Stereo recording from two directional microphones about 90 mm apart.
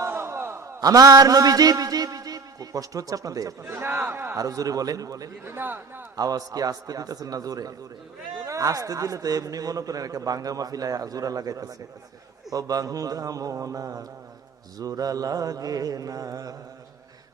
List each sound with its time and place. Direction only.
0.0 s a sound: 30° right (ahead or behind)
0.8 s a man's voice: 40° right (ahead or behind)
3.6 s speech: 25° right (ahead or behind)
4.4 s a man's voice: 40° right (ahead or behind)
5.5 s speech: 25° right (ahead or behind)
6.1 s a man's voice: 45° right (ahead or behind)